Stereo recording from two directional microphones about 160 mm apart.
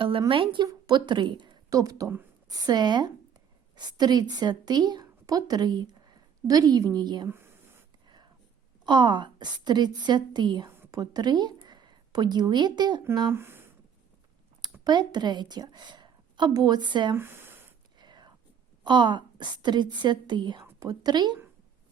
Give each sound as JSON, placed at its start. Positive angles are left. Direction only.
{"t": 0.0, "sound": "a woman's voice", "side_deg": -30}
{"t": 7.3, "sound": "speech", "side_deg": -15}
{"t": 8.9, "sound": "a woman's voice", "side_deg": -30}
{"t": 10.7, "sound": "a sound", "side_deg": -15}
{"t": 11.0, "sound": "a woman's voice", "side_deg": -25}
{"t": 13.1, "sound": "speech", "side_deg": -15}
{"t": 14.6, "sound": "a woman's voice", "side_deg": -25}
{"t": 17.2, "sound": "speech", "side_deg": -15}
{"t": 18.0, "sound": "whispering", "side_deg": -25}
{"t": 18.9, "sound": "a woman's voice", "side_deg": -30}